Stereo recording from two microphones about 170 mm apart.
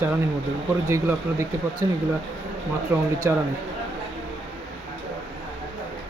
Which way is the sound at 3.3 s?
15° right (ahead or behind).